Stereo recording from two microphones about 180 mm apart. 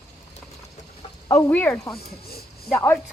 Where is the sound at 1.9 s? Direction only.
60° left (ahead or behind).